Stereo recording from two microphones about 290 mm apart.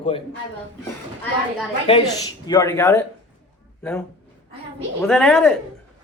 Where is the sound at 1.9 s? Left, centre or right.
Centre.